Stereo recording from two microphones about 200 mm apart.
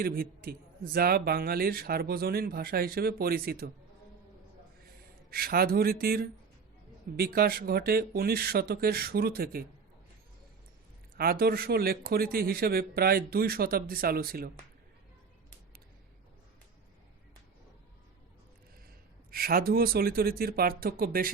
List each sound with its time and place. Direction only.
0.0 s speech: 50° right (ahead or behind)
5.3 s speech: 50° right (ahead or behind)
11.2 s speech: 50° right (ahead or behind)
19.3 s speech: 50° right (ahead or behind)